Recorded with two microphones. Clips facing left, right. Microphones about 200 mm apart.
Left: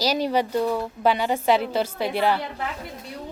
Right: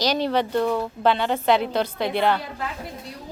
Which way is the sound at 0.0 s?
10° left (ahead or behind).